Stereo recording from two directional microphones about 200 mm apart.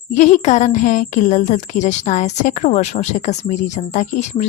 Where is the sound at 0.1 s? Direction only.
35° left (ahead or behind).